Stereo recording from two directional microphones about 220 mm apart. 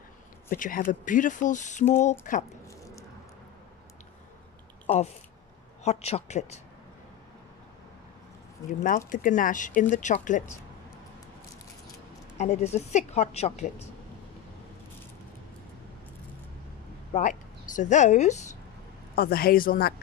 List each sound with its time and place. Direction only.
0.5 s speech: 40° left (ahead or behind)
5.9 s speech: 30° left (ahead or behind)
8.8 s speech: 40° left (ahead or behind)
12.4 s speech: 30° left (ahead or behind)
17.1 s a woman's voice: 35° left (ahead or behind)
19.1 s a woman's voice: 45° left (ahead or behind)